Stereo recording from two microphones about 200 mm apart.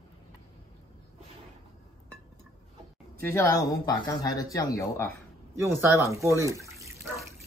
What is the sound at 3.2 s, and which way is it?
Speech, 15° left (ahead or behind).